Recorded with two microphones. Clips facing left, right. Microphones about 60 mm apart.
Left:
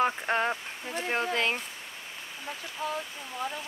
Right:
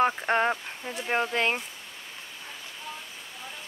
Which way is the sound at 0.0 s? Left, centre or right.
Centre.